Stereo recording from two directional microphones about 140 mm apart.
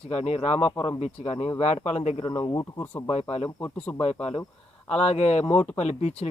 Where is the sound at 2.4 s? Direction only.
25° left (ahead or behind).